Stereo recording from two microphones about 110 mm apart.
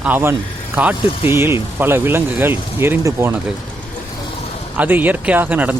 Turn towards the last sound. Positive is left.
turn(degrees=-15)  # may be behind; listen again after turning